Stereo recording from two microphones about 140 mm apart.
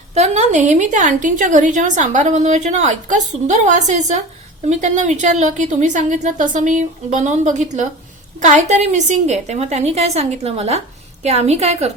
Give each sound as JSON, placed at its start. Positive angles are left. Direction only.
{"t": 0.1, "sound": "a woman's voice", "side_deg": -55}